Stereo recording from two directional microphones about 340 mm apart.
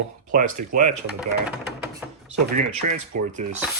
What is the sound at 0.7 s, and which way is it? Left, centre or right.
Rub, right.